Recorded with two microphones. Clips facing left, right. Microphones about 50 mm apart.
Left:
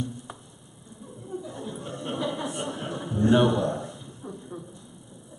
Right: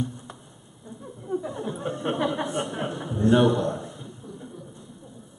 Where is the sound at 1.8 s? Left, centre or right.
Right.